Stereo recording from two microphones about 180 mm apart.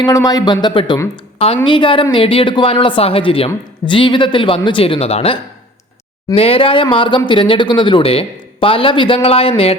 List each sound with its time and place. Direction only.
0.0 s speech: 20° left (ahead or behind)